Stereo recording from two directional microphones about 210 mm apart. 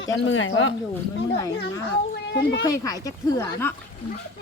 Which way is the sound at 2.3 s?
60° left (ahead or behind).